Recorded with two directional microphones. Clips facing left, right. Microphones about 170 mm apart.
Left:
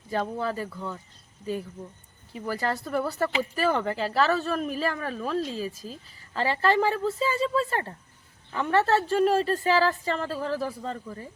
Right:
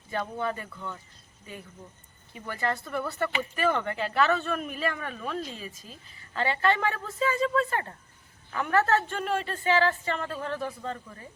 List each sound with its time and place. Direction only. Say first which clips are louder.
0.1 s a woman's voice: left 3 dB; 35° left (ahead or behind)
2.5 s a woman's voice: left 3 dB; 35° left (ahead or behind)